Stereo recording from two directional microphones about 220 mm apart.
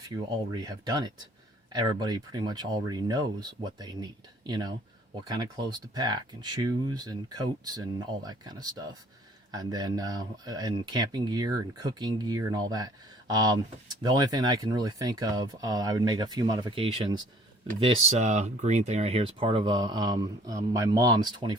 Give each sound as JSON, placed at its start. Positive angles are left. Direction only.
{"t": 0.5, "sound": "speech", "side_deg": -15}